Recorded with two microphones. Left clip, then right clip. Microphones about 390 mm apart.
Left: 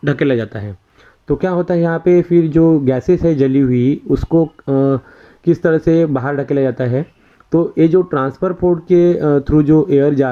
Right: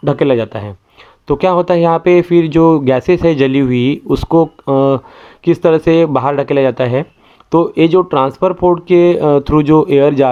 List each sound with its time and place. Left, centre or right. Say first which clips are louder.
0.0 s speech: right 4 dB; centre